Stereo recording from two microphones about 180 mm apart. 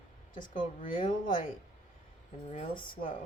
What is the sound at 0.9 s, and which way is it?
A woman's voice, 30° left (ahead or behind).